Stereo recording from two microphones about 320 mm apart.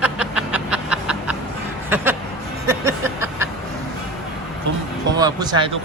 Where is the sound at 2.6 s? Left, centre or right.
Centre.